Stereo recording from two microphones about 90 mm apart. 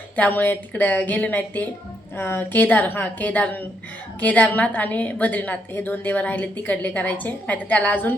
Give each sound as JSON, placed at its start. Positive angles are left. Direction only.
{"t": 0.2, "sound": "a woman's voice", "side_deg": 20}